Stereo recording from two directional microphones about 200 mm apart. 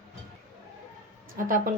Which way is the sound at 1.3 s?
45° right (ahead or behind).